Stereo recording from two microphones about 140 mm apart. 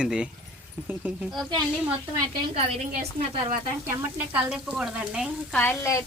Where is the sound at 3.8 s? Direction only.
10° right (ahead or behind).